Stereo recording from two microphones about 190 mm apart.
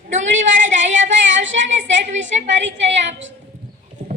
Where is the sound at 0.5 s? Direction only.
40° right (ahead or behind).